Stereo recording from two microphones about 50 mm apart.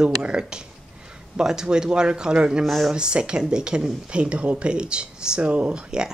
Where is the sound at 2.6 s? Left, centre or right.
Centre.